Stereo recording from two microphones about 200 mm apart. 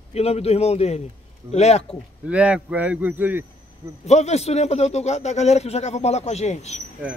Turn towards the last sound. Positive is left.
turn(degrees=35)  # may be behind; listen again after turning